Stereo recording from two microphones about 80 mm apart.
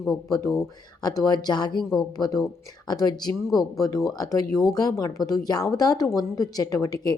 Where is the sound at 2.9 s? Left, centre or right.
Left.